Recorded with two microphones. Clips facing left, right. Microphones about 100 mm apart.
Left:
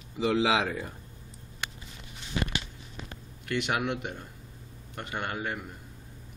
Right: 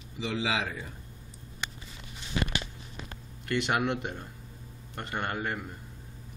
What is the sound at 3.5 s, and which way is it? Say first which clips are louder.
Speech: right 1 dB; 5° left (ahead or behind).